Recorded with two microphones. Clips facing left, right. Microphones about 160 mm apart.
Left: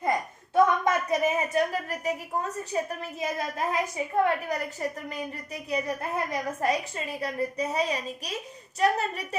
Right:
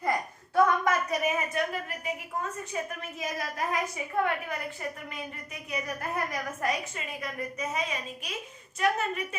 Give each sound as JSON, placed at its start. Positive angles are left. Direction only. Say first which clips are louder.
{"t": 0.0, "sound": "a woman's voice", "louder": "left 2 dB", "side_deg": 20}
{"t": 5.7, "sound": "a woman's voice", "louder": "left 4 dB", "side_deg": 25}